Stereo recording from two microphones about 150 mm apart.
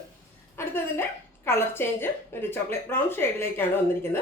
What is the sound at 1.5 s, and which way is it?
Speech, 15° left (ahead or behind).